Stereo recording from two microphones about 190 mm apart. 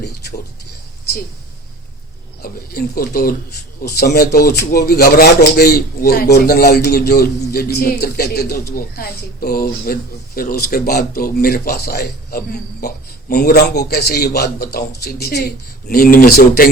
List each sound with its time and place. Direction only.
2.4 s a man's voice: 50° left (ahead or behind)